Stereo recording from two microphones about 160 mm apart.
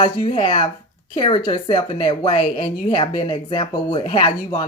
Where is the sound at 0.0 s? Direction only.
35° left (ahead or behind).